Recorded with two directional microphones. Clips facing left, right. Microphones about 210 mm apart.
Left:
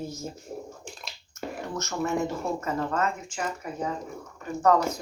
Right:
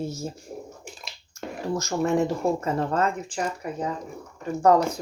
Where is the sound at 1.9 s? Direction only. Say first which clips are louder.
Right 4 dB; 35° right (ahead or behind).